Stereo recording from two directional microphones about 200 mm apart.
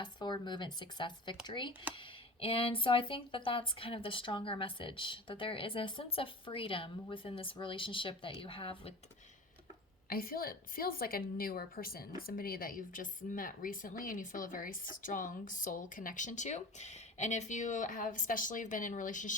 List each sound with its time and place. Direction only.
0.0 s speech: 20° left (ahead or behind)
10.1 s a woman's voice: 45° left (ahead or behind)